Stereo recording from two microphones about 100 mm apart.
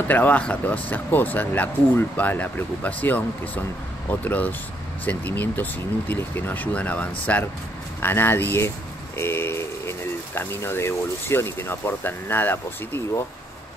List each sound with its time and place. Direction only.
0.1 s speech: 15° left (ahead or behind)